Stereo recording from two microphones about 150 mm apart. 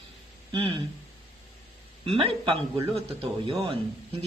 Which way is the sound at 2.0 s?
35° right (ahead or behind).